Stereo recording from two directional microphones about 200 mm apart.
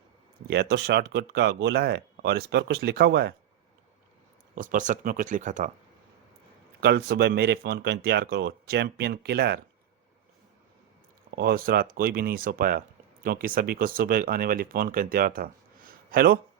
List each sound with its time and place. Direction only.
0.4 s speech: 55° right (ahead or behind)
4.5 s speech: 40° right (ahead or behind)
6.8 s speech: 55° right (ahead or behind)
11.3 s speech: 50° right (ahead or behind)